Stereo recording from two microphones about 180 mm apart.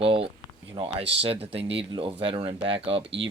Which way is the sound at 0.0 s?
30° right (ahead or behind).